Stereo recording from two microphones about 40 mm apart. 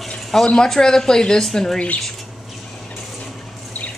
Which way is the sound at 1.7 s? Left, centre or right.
Left.